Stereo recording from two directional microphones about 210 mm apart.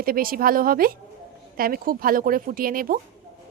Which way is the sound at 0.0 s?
45° right (ahead or behind).